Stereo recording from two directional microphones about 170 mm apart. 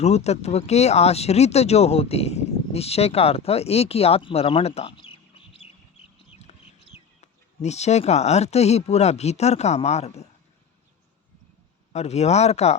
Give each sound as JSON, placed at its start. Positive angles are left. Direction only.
{"t": 0.0, "sound": "speech", "side_deg": 40}
{"t": 6.5, "sound": "chicken", "side_deg": 40}
{"t": 7.2, "sound": "speech", "side_deg": 40}
{"t": 11.9, "sound": "speech", "side_deg": 40}